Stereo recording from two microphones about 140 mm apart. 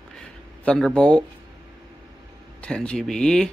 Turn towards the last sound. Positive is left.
turn(degrees=5)  # may be behind; listen again after turning